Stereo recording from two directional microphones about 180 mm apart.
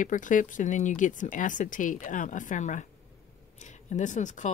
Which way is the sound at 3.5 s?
40° left (ahead or behind).